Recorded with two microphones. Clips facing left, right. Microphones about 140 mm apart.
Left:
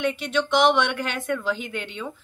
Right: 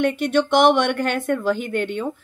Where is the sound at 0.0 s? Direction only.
50° right (ahead or behind).